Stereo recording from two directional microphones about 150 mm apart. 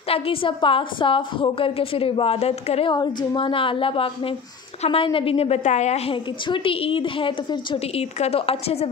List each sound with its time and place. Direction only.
0.1 s a woman's voice: 35° left (ahead or behind)
2.9 s a woman's voice: 30° left (ahead or behind)